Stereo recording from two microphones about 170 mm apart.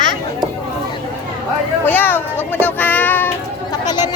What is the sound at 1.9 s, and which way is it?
Children playing, 10° left (ahead or behind).